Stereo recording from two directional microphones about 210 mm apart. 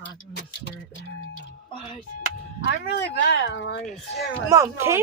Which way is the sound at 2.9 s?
55° left (ahead or behind).